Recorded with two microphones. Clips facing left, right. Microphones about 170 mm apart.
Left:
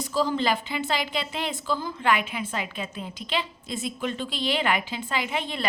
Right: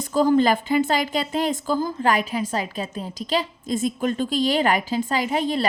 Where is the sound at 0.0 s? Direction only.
50° right (ahead or behind).